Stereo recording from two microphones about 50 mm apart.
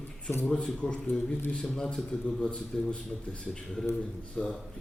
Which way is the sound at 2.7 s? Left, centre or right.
Centre.